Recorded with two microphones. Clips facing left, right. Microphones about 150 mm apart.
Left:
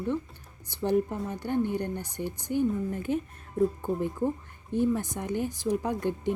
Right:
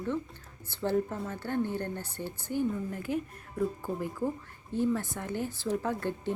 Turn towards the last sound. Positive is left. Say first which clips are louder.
# left 3 dB
turn(degrees=15)  # may be behind; listen again after turning